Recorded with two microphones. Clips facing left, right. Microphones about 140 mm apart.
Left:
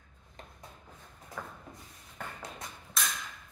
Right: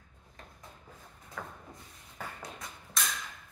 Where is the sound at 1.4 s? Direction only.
5° left (ahead or behind).